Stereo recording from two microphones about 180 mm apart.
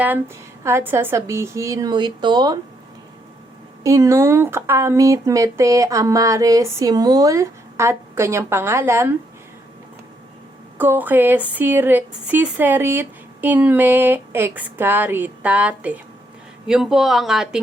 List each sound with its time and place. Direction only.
0.6 s speech: 15° right (ahead or behind)
3.8 s speech: 15° right (ahead or behind)
10.8 s speech: 10° right (ahead or behind)